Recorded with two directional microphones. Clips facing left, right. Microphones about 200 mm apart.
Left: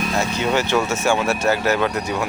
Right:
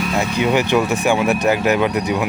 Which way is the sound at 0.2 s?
15° right (ahead or behind).